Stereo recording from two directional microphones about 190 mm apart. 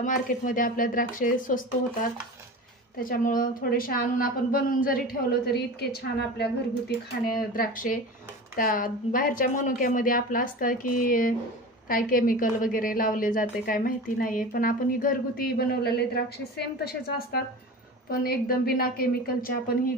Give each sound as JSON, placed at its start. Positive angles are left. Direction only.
{"t": 0.0, "sound": "a woman's voice", "side_deg": 45}
{"t": 3.0, "sound": "a woman's voice", "side_deg": 45}